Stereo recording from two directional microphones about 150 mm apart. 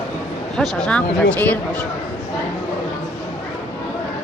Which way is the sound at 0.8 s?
10° left (ahead or behind).